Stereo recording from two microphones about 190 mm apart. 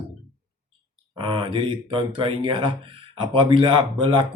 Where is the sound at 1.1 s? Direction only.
25° right (ahead or behind).